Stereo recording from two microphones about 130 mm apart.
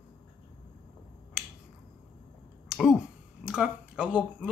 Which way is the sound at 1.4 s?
Centre (ahead or behind).